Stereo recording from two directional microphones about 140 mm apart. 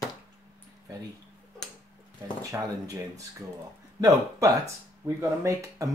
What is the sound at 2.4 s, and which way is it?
Speech, 25° right (ahead or behind).